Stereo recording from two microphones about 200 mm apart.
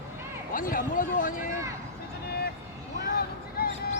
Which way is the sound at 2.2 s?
55° left (ahead or behind).